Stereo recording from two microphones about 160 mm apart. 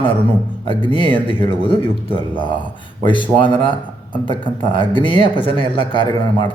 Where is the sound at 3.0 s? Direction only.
30° left (ahead or behind).